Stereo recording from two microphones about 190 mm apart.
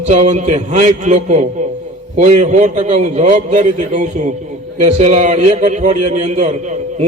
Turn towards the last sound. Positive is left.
turn(degrees=-35)  # may be behind; listen again after turning